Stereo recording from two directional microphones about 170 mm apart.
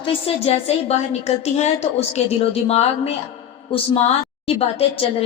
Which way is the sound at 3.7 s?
35° left (ahead or behind).